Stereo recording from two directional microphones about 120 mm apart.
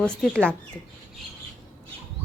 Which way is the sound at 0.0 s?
5° left (ahead or behind).